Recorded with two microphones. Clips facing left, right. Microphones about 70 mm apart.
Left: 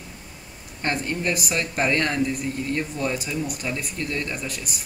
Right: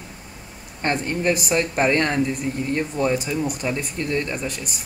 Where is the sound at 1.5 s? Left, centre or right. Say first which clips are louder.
Right 3 dB; centre.